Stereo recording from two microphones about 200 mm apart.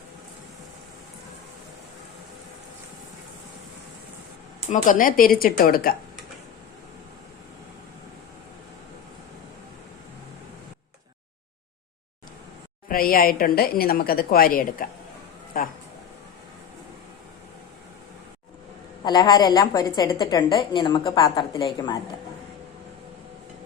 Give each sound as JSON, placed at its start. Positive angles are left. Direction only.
{"t": 4.7, "sound": "a woman's voice", "side_deg": 40}
{"t": 12.9, "sound": "a woman's voice", "side_deg": 45}
{"t": 19.0, "sound": "a woman's voice", "side_deg": 20}